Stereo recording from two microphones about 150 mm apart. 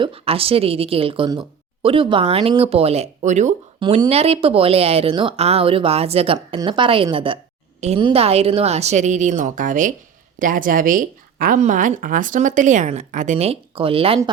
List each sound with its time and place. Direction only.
0.0 s speech: 40° right (ahead or behind)
3.8 s a woman's voice: 35° right (ahead or behind)